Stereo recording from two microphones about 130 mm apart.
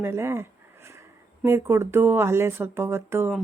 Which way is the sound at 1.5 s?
20° right (ahead or behind).